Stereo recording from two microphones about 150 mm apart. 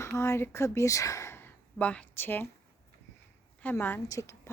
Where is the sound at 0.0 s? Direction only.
20° left (ahead or behind).